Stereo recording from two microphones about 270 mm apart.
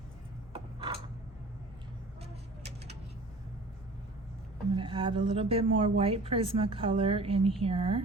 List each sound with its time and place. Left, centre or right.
4.7 s speech: centre